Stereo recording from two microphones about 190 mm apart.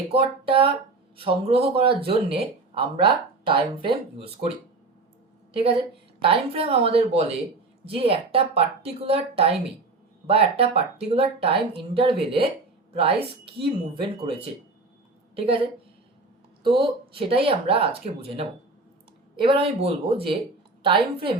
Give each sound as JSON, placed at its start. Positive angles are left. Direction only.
{"t": 0.1, "sound": "speech", "side_deg": -30}
{"t": 6.2, "sound": "speech", "side_deg": -30}
{"t": 16.8, "sound": "speech", "side_deg": -30}